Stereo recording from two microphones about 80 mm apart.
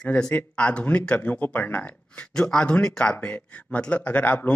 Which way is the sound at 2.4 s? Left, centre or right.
Centre.